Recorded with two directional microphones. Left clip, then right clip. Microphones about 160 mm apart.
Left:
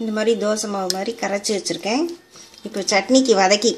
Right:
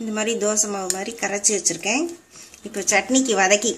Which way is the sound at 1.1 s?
30° left (ahead or behind).